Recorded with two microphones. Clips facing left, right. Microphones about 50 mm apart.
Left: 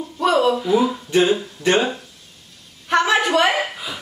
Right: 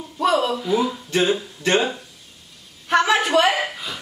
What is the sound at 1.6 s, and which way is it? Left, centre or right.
Speech, centre.